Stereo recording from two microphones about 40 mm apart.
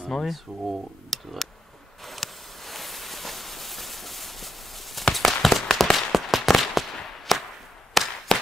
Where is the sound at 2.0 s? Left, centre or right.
Centre.